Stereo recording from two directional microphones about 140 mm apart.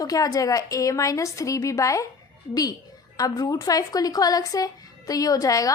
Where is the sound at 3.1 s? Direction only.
25° left (ahead or behind).